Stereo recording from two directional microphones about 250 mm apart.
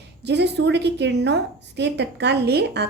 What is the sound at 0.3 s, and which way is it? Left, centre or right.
A woman's voice, right.